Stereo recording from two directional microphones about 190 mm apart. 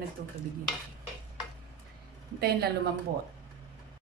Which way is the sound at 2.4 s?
55° right (ahead or behind).